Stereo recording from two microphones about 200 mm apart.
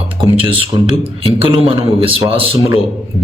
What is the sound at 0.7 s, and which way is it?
A man's voice, 25° right (ahead or behind).